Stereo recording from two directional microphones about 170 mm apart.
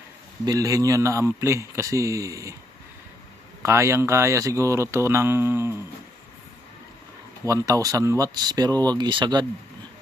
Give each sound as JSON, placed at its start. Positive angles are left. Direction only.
{"t": 0.4, "sound": "speech", "side_deg": -20}
{"t": 3.6, "sound": "speech", "side_deg": -15}
{"t": 7.4, "sound": "speech", "side_deg": -20}